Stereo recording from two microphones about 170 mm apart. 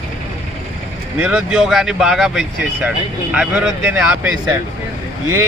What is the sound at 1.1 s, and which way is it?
Speech, 5° right (ahead or behind).